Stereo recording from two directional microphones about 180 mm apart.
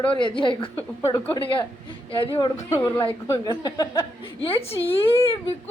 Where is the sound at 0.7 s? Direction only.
10° left (ahead or behind).